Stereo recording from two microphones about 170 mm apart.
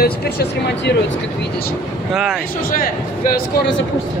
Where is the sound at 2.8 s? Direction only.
75° left (ahead or behind).